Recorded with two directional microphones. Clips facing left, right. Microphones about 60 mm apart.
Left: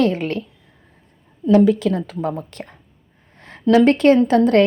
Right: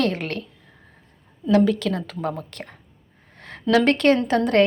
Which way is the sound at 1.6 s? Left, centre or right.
Centre.